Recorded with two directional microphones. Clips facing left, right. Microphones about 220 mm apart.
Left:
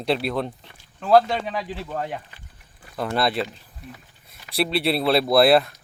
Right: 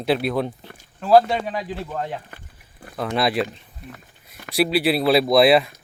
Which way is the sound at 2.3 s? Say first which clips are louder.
Right 6 dB; 55° right (ahead or behind).